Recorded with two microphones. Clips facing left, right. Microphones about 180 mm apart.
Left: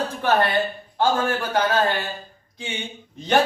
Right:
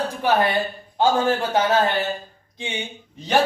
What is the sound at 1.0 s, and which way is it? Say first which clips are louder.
Speech: right 2 dB; 20° right (ahead or behind).